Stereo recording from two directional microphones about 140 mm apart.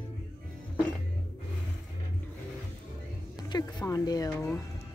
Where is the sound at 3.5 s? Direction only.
30° left (ahead or behind).